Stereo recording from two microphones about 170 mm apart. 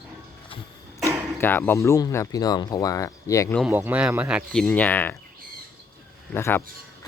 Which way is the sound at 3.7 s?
10° right (ahead or behind).